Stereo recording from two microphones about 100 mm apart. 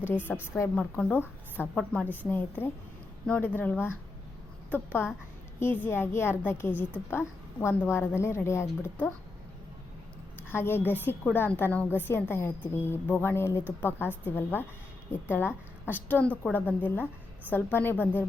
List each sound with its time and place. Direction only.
0.3 s speech: 10° left (ahead or behind)
2.6 s a woman's voice: 20° left (ahead or behind)
10.5 s a woman's voice: 25° left (ahead or behind)